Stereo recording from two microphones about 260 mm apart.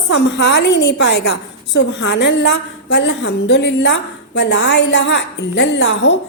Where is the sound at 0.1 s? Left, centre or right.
Left.